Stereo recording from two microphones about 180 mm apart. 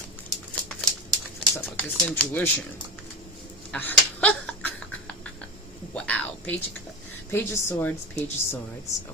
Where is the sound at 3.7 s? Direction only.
10° left (ahead or behind).